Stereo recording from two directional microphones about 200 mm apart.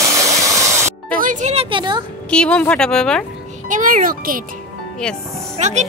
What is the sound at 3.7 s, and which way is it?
Speech, 40° right (ahead or behind).